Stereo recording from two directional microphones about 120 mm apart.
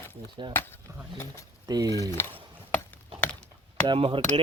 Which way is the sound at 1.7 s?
30° right (ahead or behind).